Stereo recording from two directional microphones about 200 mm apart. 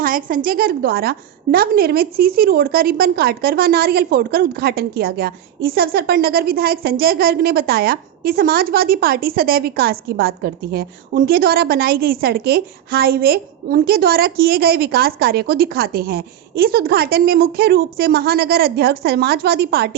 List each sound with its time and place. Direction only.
0.0 s a woman's voice: 45° right (ahead or behind)